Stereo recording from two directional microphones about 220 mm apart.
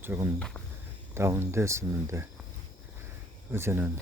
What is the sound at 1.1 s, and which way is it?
Speech, 10° right (ahead or behind).